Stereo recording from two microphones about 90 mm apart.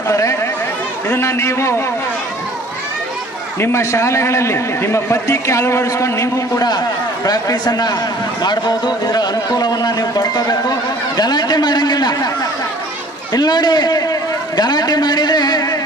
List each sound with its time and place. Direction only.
0.1 s chatter: 35° left (ahead or behind)
1.0 s a man's voice: 30° left (ahead or behind)
3.6 s a man's voice: 30° left (ahead or behind)
7.3 s a man's voice: 45° left (ahead or behind)
13.3 s a man's voice: 55° left (ahead or behind)